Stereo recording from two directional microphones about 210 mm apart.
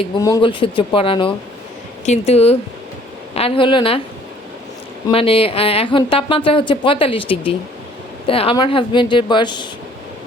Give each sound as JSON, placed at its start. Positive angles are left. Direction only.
{"t": 0.2, "sound": "speech", "side_deg": 20}
{"t": 5.0, "sound": "speech", "side_deg": 25}